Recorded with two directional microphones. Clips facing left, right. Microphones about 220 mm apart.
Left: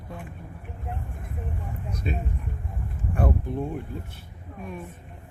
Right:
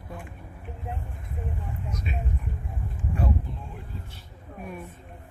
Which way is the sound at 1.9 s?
35° left (ahead or behind).